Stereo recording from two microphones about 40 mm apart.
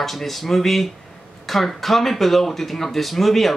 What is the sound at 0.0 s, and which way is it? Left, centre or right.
Speech, centre.